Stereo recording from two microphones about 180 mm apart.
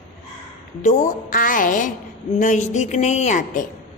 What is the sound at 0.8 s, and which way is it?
A woman's voice, 45° left (ahead or behind).